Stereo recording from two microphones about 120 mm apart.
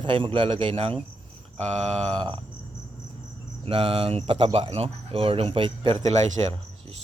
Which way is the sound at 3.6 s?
50° right (ahead or behind).